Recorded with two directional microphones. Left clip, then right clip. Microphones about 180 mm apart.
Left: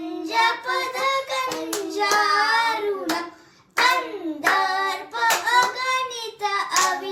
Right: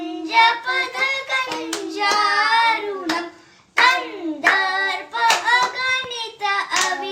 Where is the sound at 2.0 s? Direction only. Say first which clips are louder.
Right 2 dB; 20° right (ahead or behind).